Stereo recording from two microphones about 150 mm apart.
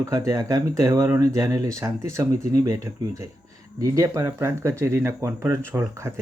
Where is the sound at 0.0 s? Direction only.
20° right (ahead or behind).